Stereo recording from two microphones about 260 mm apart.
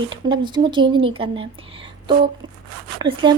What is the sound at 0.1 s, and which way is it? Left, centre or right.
Speech, centre.